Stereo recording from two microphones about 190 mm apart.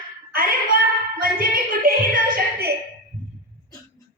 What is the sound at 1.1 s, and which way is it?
Speech, 50° right (ahead or behind).